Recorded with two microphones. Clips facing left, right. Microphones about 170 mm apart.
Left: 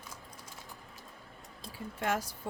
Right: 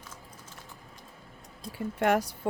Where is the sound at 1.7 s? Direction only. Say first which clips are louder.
Right 8 dB; 65° right (ahead or behind).